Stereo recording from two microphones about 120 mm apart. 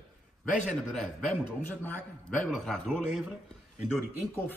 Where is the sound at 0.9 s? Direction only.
5° left (ahead or behind).